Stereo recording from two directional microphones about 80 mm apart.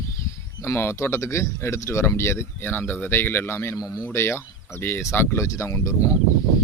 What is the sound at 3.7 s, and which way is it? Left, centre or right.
Speech, left.